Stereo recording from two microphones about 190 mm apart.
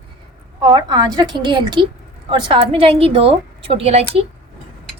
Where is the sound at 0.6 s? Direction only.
20° right (ahead or behind).